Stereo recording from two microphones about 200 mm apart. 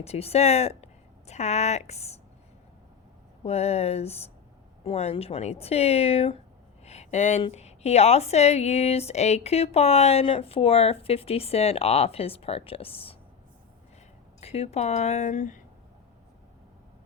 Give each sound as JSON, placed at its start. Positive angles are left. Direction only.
{"t": 0.0, "sound": "a woman's voice", "side_deg": 30}
{"t": 3.4, "sound": "a woman's voice", "side_deg": 30}
{"t": 14.4, "sound": "a woman's voice", "side_deg": 30}